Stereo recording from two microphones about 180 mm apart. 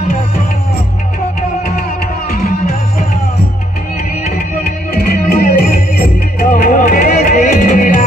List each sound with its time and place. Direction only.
2.3 s music: 55° left (ahead or behind)
4.9 s music: 55° left (ahead or behind)